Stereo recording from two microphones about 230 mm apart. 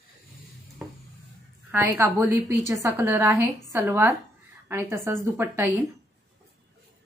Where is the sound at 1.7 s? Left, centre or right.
Centre.